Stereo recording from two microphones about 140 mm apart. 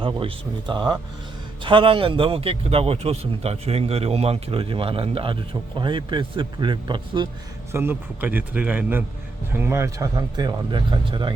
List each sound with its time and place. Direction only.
0.0 s a man's voice: 40° right (ahead or behind)
7.7 s a man's voice: 15° right (ahead or behind); by 11.3 s 35° right (ahead or behind)